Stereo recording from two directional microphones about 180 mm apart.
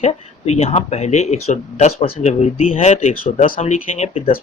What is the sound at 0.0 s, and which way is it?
Speech, 35° left (ahead or behind).